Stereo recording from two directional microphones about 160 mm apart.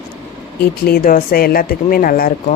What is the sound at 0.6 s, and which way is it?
Speech, 75° left (ahead or behind).